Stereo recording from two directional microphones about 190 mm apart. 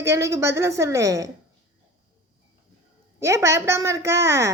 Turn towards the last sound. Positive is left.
turn(degrees=-15)  # may be behind; listen again after turning